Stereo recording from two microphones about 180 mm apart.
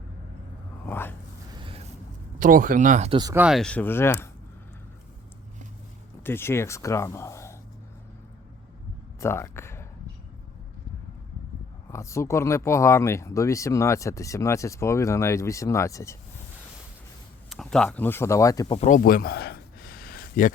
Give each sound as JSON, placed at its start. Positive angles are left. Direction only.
{"t": 0.9, "sound": "a sound", "side_deg": 10}
{"t": 2.4, "sound": "speech", "side_deg": -50}
{"t": 3.1, "sound": "speech", "side_deg": -25}
{"t": 3.3, "sound": "speech", "side_deg": -5}
{"t": 6.2, "sound": "speech", "side_deg": 15}
{"t": 9.2, "sound": "speech", "side_deg": 15}
{"t": 11.9, "sound": "speech", "side_deg": 15}
{"t": 17.5, "sound": "speech", "side_deg": 0}
{"t": 18.8, "sound": "a sound", "side_deg": 45}